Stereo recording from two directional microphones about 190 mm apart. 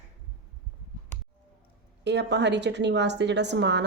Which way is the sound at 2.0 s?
65° right (ahead or behind).